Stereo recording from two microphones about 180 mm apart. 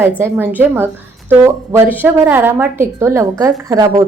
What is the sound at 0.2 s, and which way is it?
A woman's voice, 10° right (ahead or behind).